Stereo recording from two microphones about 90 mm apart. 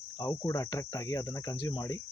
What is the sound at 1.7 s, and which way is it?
Speech, 45° left (ahead or behind).